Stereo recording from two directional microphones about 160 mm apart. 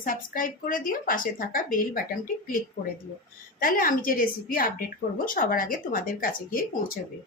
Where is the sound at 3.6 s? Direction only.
60° left (ahead or behind).